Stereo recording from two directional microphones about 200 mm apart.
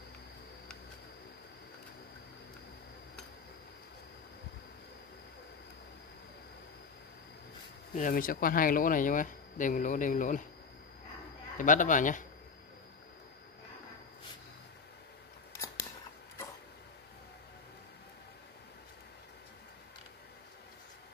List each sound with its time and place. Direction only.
7.9 s speech: 40° left (ahead or behind)
11.5 s speech: 40° left (ahead or behind)
15.5 s scissors: 15° left (ahead or behind)